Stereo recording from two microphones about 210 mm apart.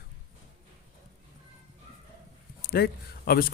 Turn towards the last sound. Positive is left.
turn(degrees=45)  # may be behind; listen again after turning